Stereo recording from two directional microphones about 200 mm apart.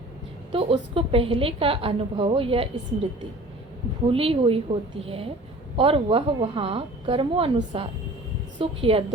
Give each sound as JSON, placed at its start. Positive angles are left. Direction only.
{"t": 0.5, "sound": "a woman's voice", "side_deg": -25}
{"t": 4.1, "sound": "a woman's voice", "side_deg": -30}